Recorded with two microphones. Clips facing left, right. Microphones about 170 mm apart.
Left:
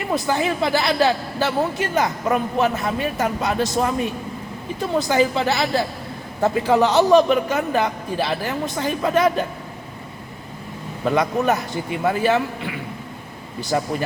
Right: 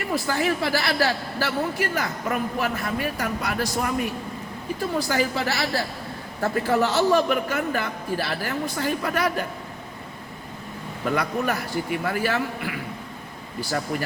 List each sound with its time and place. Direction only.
0.1 s a man's voice: 20° left (ahead or behind)
11.2 s a man's voice: 20° left (ahead or behind)